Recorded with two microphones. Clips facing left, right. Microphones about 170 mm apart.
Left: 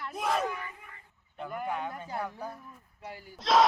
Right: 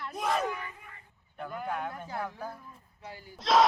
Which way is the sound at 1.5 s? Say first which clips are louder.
Left 1 dB; 5° left (ahead or behind).